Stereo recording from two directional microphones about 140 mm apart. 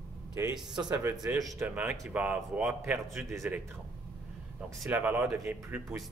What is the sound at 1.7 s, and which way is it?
A man's voice, 10° right (ahead or behind).